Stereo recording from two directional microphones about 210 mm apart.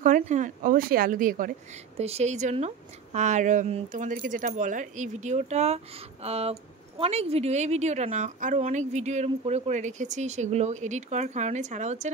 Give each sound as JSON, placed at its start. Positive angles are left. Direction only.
{"t": 0.0, "sound": "a woman's voice", "side_deg": -35}
{"t": 2.0, "sound": "a woman's voice", "side_deg": -30}